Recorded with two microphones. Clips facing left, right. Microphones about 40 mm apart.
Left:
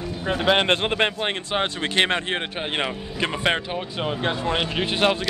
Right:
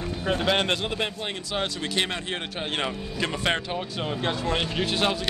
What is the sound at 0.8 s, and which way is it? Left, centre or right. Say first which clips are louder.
Speech: left 7 dB; left.